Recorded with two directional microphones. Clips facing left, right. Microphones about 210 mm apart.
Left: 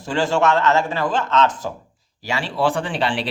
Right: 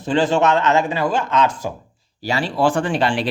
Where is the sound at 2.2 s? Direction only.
35° right (ahead or behind).